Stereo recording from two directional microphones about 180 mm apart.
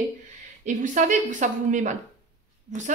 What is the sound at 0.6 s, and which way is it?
A woman's voice, 45° right (ahead or behind).